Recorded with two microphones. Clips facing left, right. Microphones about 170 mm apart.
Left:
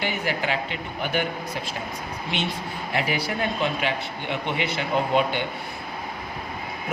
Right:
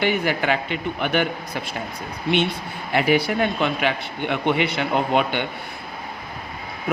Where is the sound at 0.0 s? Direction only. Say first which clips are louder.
Right 5 dB; 65° right (ahead or behind).